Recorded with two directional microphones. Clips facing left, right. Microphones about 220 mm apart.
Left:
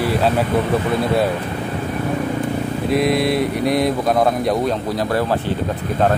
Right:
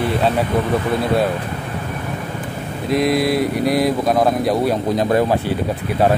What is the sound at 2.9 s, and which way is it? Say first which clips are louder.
Speech: right 1 dB; centre (ahead or behind).